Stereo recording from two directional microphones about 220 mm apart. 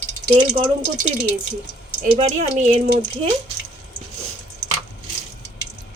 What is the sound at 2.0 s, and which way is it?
Speech, 30° right (ahead or behind).